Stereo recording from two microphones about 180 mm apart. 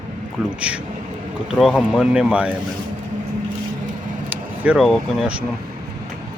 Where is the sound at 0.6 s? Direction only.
5° right (ahead or behind).